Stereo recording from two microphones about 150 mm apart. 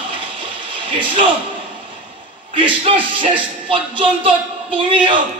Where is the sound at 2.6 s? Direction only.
35° right (ahead or behind).